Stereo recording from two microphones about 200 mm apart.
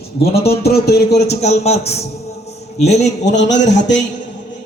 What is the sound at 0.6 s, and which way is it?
Speech, 55° left (ahead or behind).